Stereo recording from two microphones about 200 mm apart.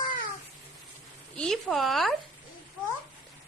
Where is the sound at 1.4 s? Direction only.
Centre (ahead or behind).